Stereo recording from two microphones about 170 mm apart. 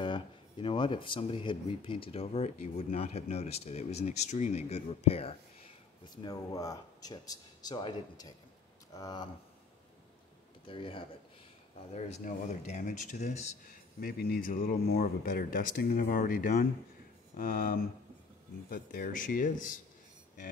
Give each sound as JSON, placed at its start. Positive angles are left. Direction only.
{"t": 0.0, "sound": "speech", "side_deg": 30}
{"t": 6.0, "sound": "speech", "side_deg": 20}
{"t": 10.7, "sound": "speech", "side_deg": 30}
{"t": 11.9, "sound": "speech", "side_deg": 40}